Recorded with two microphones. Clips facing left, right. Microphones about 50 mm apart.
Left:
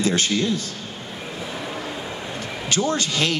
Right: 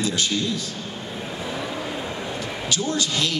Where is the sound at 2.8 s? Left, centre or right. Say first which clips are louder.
Left 3 dB; left.